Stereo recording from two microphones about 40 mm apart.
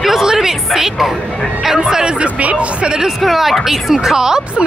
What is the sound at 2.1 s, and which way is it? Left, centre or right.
Speech, right.